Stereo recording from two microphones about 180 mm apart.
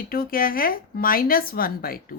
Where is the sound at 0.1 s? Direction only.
55° left (ahead or behind).